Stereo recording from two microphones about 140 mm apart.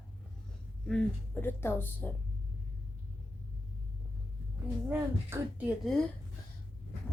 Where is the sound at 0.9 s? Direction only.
10° left (ahead or behind).